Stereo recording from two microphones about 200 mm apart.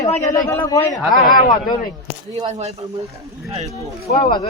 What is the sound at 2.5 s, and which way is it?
Speech, 35° right (ahead or behind).